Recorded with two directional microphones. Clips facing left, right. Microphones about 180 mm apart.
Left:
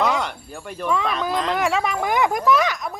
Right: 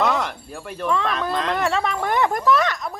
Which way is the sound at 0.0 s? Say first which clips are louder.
Even; centre (ahead or behind).